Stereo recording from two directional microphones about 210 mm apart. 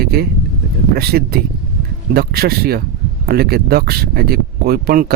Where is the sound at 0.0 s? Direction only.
45° right (ahead or behind).